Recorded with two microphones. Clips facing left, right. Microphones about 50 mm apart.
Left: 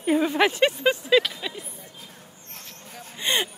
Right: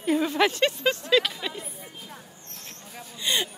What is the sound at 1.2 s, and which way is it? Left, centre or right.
Speech, centre.